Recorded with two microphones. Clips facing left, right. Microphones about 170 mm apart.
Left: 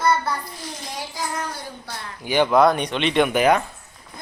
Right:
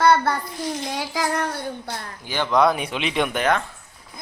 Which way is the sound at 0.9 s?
85° right.